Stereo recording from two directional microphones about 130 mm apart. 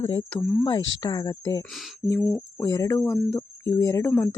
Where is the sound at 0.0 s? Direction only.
30° left (ahead or behind).